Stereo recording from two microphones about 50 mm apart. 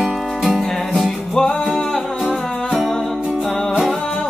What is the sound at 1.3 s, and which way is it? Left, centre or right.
Music, centre.